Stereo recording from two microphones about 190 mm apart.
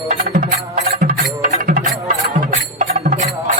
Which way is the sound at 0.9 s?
45° right (ahead or behind).